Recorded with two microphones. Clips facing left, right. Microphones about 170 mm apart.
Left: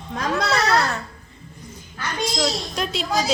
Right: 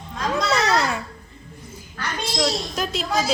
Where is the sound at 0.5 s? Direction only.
10° right (ahead or behind).